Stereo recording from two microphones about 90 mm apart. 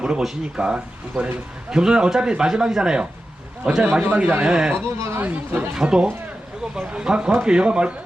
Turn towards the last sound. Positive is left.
turn(degrees=-10)  # may be behind; listen again after turning